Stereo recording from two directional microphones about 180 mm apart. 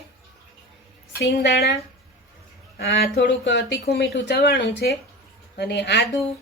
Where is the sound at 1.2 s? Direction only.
65° left (ahead or behind).